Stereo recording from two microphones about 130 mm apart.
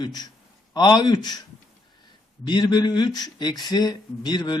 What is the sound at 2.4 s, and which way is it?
Speech, 35° left (ahead or behind).